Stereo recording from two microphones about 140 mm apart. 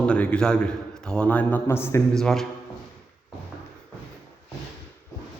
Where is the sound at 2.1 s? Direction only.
5° left (ahead or behind).